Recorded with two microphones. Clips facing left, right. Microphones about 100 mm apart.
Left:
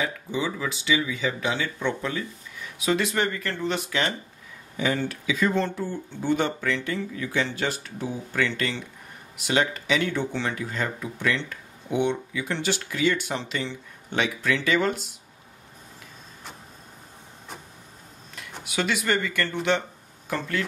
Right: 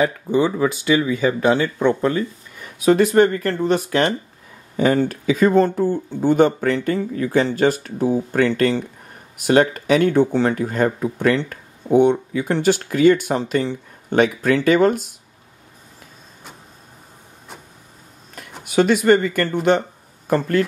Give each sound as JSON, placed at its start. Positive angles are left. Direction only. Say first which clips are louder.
{"t": 0.0, "sound": "speech", "louder": "right 10 dB", "side_deg": -50}
{"t": 18.6, "sound": "speech", "louder": "right 11 dB", "side_deg": -45}